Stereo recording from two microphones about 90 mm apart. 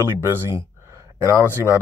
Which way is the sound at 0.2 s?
35° right (ahead or behind).